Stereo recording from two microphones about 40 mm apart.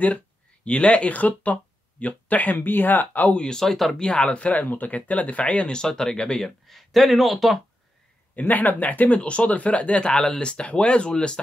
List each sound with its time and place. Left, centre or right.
0.7 s speech: left
3.5 s speech: centre
4.0 s speech: left
4.6 s speech: left
5.7 s speech: centre
6.7 s speech: centre
8.4 s speech: left